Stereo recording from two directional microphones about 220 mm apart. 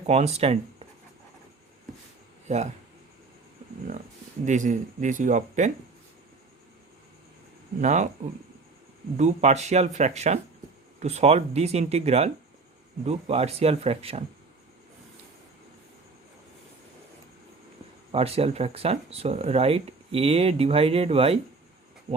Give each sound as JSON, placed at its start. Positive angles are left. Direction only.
{"t": 0.1, "sound": "speech", "side_deg": -30}
{"t": 2.5, "sound": "speech", "side_deg": -30}
{"t": 4.4, "sound": "speech", "side_deg": -35}
{"t": 7.8, "sound": "speech", "side_deg": -30}
{"t": 9.1, "sound": "speech", "side_deg": -30}
{"t": 18.1, "sound": "speech", "side_deg": -25}